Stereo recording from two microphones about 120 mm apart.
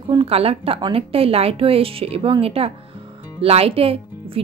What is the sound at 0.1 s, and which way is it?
Speech, 50° right (ahead or behind).